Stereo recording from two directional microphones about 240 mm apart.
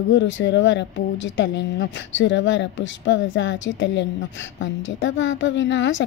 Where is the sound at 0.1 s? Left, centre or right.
Left.